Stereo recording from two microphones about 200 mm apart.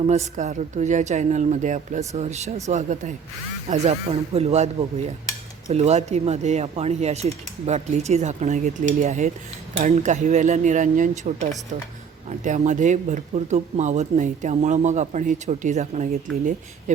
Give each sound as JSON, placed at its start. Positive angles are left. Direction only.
{"t": 0.1, "sound": "speech", "side_deg": -35}